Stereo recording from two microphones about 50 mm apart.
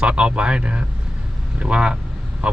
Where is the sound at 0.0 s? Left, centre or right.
Right.